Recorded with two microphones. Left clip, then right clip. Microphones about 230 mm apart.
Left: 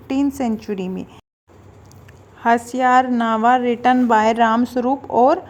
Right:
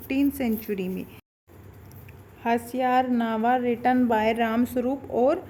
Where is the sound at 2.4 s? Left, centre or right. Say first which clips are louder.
Left 9 dB; centre.